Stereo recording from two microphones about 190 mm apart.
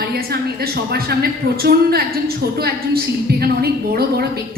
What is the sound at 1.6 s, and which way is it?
A woman's voice, 55° right (ahead or behind).